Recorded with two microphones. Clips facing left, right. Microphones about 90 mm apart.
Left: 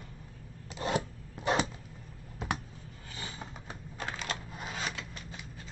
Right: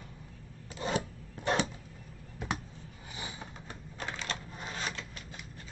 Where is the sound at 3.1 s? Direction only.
15° right (ahead or behind).